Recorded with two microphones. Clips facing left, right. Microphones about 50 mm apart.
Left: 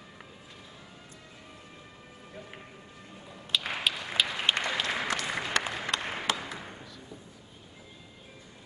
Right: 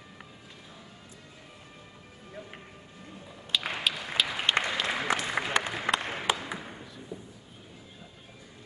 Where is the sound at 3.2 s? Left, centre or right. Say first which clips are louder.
Even; centre.